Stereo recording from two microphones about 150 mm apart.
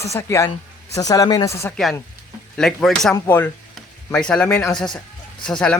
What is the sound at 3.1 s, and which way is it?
Speech, 15° left (ahead or behind).